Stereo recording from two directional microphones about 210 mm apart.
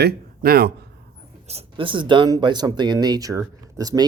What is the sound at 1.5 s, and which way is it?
Speech, 25° right (ahead or behind).